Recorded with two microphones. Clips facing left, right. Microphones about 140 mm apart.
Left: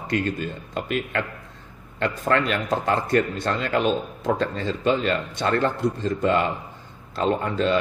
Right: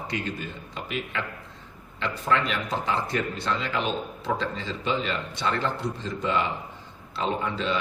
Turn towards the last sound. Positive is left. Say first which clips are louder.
# left 6 dB
turn(degrees=50)  # may be behind; listen again after turning